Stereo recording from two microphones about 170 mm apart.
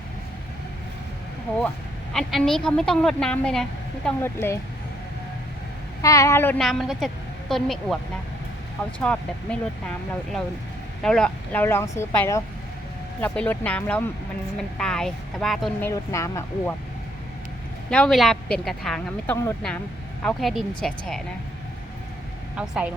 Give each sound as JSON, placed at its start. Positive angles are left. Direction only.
{"t": 1.5, "sound": "a woman's voice", "side_deg": 5}
{"t": 4.2, "sound": "speech", "side_deg": 15}
{"t": 6.0, "sound": "speech", "side_deg": 20}
{"t": 6.6, "sound": "a woman's voice", "side_deg": 0}
{"t": 9.0, "sound": "a woman's voice", "side_deg": 5}
{"t": 15.8, "sound": "speech", "side_deg": 15}
{"t": 17.9, "sound": "a woman's voice", "side_deg": 5}
{"t": 22.5, "sound": "a woman's voice", "side_deg": -5}